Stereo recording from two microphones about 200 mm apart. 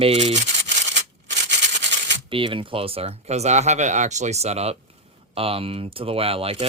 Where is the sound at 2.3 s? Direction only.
25° right (ahead or behind).